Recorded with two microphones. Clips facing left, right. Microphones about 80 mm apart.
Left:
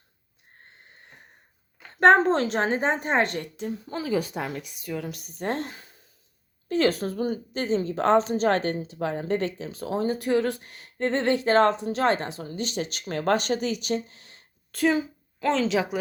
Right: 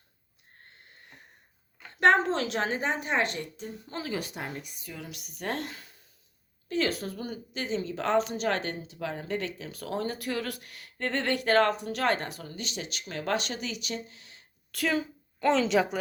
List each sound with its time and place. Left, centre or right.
2.0 s a woman's voice: left
4.4 s speech: left
5.0 s a woman's voice: left
6.7 s a woman's voice: left
15.4 s speech: centre